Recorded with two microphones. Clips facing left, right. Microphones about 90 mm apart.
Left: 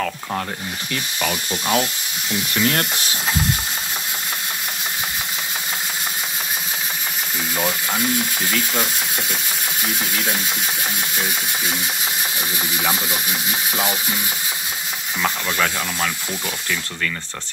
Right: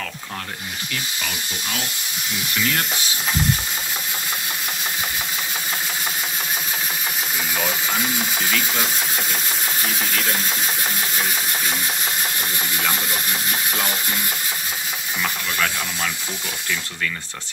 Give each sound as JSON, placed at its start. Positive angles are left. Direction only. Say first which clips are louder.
{"t": 1.2, "sound": "speech", "louder": "left 6 dB", "side_deg": 40}
{"t": 7.5, "sound": "speech", "louder": "left 2 dB", "side_deg": 5}
{"t": 8.5, "sound": "ratchet", "louder": "left 1 dB", "side_deg": 0}
{"t": 12.7, "sound": "speech", "louder": "left 2 dB", "side_deg": 15}